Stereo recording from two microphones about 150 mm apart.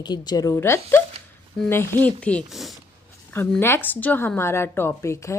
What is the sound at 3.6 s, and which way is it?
A woman's voice, 15° left (ahead or behind).